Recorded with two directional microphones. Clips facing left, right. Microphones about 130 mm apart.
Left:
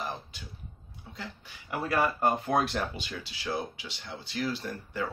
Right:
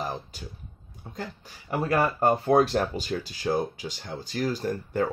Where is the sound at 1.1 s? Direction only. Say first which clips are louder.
Right 6 dB; 45° right (ahead or behind).